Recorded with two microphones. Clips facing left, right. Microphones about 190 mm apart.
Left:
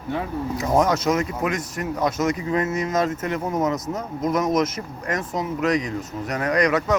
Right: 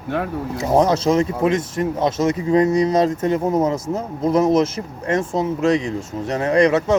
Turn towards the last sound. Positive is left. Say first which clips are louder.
# right 5 dB
turn(degrees=-25)  # may be behind; listen again after turning